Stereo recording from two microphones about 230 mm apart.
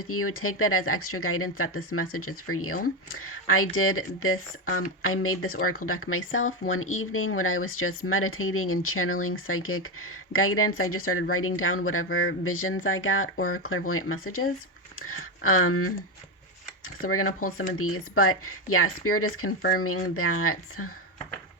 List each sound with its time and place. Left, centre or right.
0.0 s speech: left
17.1 s speech: left